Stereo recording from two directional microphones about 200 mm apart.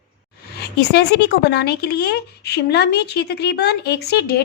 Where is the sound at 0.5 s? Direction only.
55° left (ahead or behind).